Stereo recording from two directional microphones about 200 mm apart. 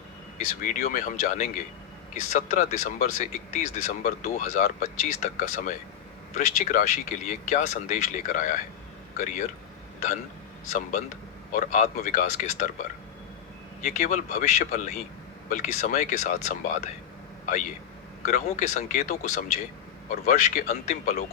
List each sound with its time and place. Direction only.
0.3 s speech: 40° left (ahead or behind)
10.7 s speech: 35° left (ahead or behind)
13.8 s speech: 35° left (ahead or behind)
18.3 s speech: 35° left (ahead or behind)